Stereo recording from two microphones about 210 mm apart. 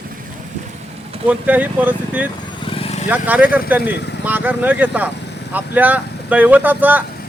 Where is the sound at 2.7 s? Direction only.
30° left (ahead or behind).